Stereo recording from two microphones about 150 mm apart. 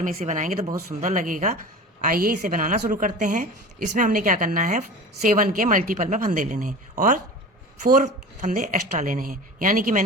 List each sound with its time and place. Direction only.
0.0 s a woman's voice: 50° right (ahead or behind)
2.0 s a woman's voice: 70° right (ahead or behind)